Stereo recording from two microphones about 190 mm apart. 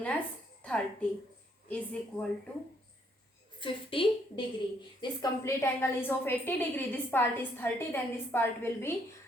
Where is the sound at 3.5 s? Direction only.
25° left (ahead or behind).